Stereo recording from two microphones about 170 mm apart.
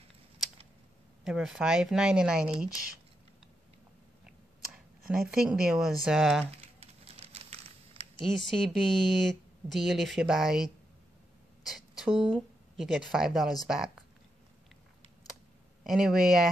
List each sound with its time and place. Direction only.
1.2 s a woman's voice: 5° right (ahead or behind)
5.0 s a woman's voice: 5° right (ahead or behind)
6.4 s crumpling: 35° right (ahead or behind)
8.3 s a woman's voice: centre (ahead or behind)
12.0 s a woman's voice: 5° right (ahead or behind)
15.8 s a woman's voice: centre (ahead or behind)